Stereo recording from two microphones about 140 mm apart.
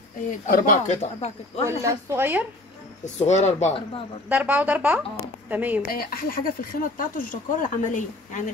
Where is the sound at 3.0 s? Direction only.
55° left (ahead or behind).